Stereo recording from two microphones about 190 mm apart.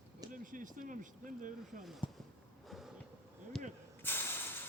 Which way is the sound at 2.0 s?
25° left (ahead or behind).